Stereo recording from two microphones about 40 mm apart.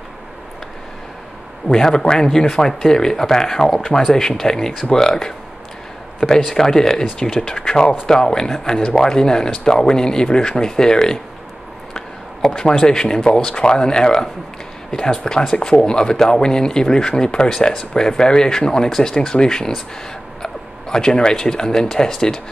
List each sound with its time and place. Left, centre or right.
1.7 s speech: centre
6.5 s speech: centre
12.4 s speech: centre